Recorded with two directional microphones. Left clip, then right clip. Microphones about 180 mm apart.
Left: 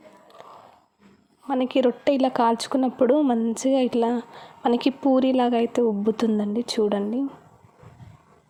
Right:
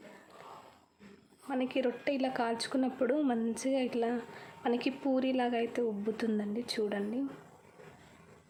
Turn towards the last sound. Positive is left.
turn(degrees=35)  # may be behind; listen again after turning